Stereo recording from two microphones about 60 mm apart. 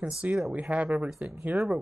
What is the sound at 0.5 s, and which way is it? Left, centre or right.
Speech, centre.